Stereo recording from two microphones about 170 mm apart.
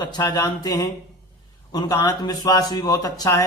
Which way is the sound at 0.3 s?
25° left (ahead or behind).